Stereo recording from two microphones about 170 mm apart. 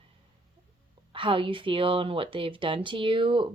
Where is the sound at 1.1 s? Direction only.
30° right (ahead or behind).